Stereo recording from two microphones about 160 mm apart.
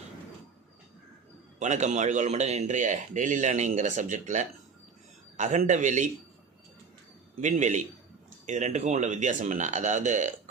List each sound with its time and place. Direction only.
1.5 s a man's voice: 50° right (ahead or behind)
7.4 s a man's voice: 50° right (ahead or behind)